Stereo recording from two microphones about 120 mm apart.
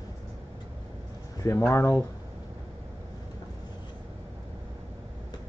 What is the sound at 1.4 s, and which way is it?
Speech, 25° left (ahead or behind).